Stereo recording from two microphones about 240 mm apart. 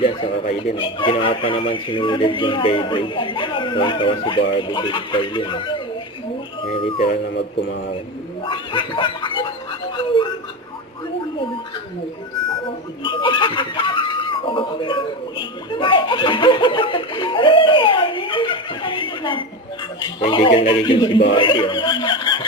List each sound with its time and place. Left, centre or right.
0.0 s speech: left
6.9 s speech: left
8.4 s chuckle: left
13.0 s speech: centre